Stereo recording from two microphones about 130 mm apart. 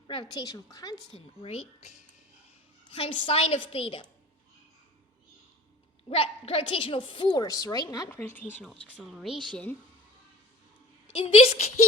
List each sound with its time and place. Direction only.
0.1 s a woman's voice: 35° left (ahead or behind)
1.1 s a woman's voice: 50° left (ahead or behind)
2.9 s a woman's voice: 45° left (ahead or behind)
6.1 s a woman's voice: 50° left (ahead or behind); by 8.1 s 30° left (ahead or behind)
8.1 s speech: 15° left (ahead or behind)
8.6 s speech: 5° right (ahead or behind)
9.5 s speech: 10° left (ahead or behind)
11.1 s a woman's voice: 45° left (ahead or behind)